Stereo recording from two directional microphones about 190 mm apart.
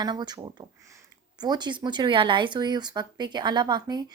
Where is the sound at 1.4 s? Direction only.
20° right (ahead or behind).